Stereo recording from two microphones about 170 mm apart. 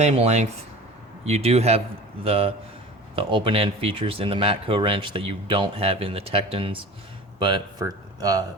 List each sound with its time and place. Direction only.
0.0 s speech: 40° right (ahead or behind); by 8.4 s 20° right (ahead or behind)